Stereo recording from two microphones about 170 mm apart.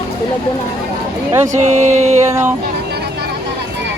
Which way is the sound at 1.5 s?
40° right (ahead or behind).